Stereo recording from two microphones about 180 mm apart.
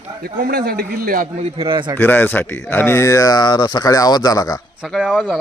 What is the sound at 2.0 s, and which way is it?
Speech, 10° left (ahead or behind).